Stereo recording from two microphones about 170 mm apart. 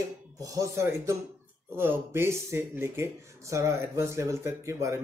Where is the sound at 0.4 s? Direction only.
20° right (ahead or behind).